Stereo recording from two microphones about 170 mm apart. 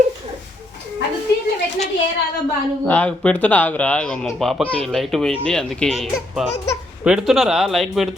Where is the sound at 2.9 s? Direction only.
10° left (ahead or behind).